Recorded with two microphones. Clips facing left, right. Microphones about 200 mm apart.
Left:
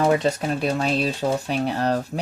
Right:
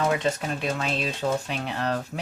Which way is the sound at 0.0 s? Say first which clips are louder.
Left 5 dB; 35° left (ahead or behind).